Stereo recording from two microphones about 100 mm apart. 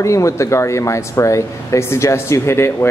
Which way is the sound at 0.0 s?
30° left (ahead or behind).